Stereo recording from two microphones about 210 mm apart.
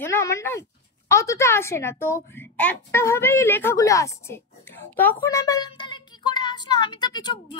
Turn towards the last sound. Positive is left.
turn(degrees=20)  # may be behind; listen again after turning